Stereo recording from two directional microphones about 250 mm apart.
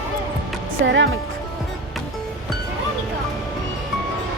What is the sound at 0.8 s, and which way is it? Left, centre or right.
Speech, right.